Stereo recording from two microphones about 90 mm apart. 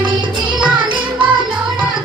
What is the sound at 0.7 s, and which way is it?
Music, 65° right (ahead or behind).